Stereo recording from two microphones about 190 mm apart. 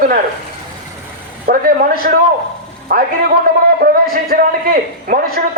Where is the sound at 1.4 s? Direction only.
55° right (ahead or behind).